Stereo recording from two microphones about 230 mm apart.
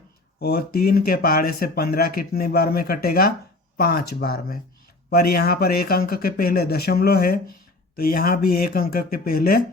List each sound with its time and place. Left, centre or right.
0.3 s speech: left